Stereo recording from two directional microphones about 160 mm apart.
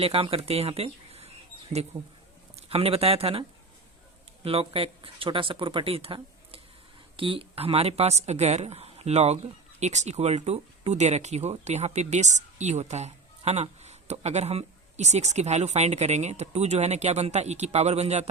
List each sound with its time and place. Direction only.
0.0 s speech: 35° right (ahead or behind)
4.4 s speech: 35° right (ahead or behind)